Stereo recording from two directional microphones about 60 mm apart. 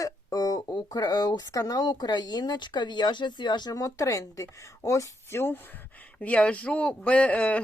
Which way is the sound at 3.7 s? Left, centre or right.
Left.